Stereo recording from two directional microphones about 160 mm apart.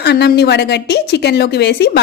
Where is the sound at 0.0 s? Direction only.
90° left.